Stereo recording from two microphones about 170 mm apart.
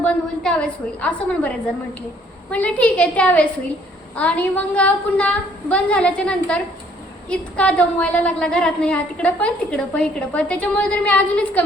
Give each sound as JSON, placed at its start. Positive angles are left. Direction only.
{"t": 0.0, "sound": "a woman's voice", "side_deg": 5}